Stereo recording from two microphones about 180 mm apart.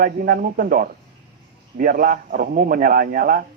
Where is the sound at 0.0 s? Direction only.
50° right (ahead or behind).